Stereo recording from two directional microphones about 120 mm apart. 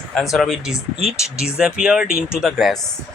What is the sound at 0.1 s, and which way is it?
Speech, centre (ahead or behind).